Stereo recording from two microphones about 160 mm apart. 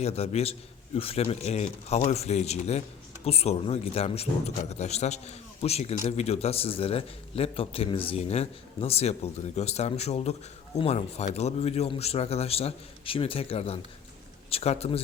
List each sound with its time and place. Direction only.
0.0 s a man's voice: 40° left (ahead or behind)